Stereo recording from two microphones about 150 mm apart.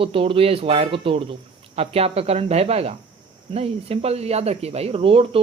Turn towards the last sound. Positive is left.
turn(degrees=-40)  # may be behind; listen again after turning